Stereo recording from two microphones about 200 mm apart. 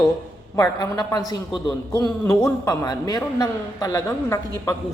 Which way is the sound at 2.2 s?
15° left (ahead or behind).